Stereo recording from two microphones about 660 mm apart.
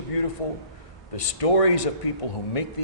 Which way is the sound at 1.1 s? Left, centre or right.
Left.